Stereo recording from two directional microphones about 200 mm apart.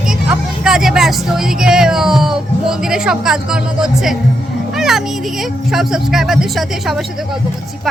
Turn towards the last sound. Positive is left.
turn(degrees=0)  # may be behind; listen again after turning